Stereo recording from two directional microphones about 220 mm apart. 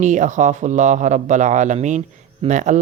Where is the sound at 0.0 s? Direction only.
35° right (ahead or behind).